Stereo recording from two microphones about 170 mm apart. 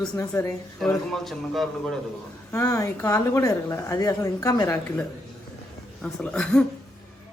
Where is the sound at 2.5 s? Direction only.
20° left (ahead or behind).